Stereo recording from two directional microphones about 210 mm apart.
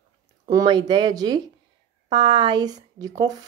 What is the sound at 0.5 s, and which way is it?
Speech, 20° right (ahead or behind).